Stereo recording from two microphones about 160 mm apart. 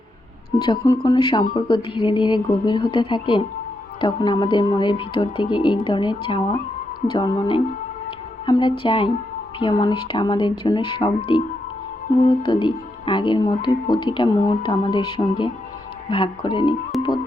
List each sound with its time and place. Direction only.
0.9 s speech: 25° left (ahead or behind)
12.0 s speech: 50° left (ahead or behind)
12.5 s speech: 30° left (ahead or behind)
16.9 s music: centre (ahead or behind)